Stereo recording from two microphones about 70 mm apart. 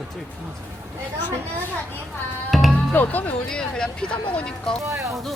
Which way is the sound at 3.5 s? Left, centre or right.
Centre.